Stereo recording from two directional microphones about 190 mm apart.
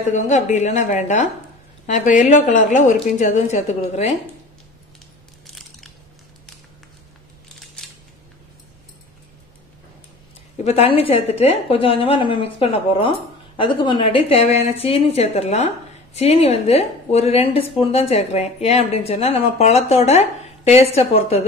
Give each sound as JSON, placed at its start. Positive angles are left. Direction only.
{"t": 0.1, "sound": "a woman's voice", "side_deg": 40}
{"t": 5.5, "sound": "crunch", "side_deg": 0}
{"t": 7.8, "sound": "scissors", "side_deg": 5}
{"t": 10.6, "sound": "a woman's voice", "side_deg": 35}